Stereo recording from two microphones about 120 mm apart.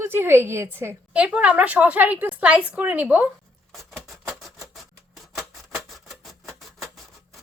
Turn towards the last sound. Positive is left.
turn(degrees=0)  # may be behind; listen again after turning